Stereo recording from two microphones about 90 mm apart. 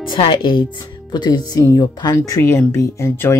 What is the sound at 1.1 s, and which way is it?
Speech, 50° left (ahead or behind).